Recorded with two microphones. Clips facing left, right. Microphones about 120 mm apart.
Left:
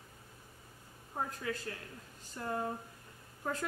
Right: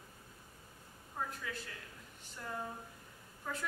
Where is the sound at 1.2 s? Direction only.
55° left (ahead or behind).